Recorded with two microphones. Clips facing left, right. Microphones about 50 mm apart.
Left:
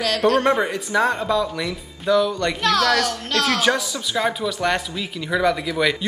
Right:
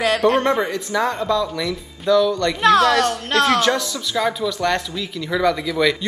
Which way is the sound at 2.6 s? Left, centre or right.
Right.